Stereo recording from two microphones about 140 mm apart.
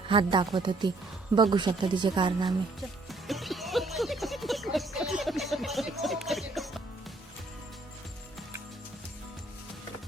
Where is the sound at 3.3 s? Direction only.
Centre (ahead or behind).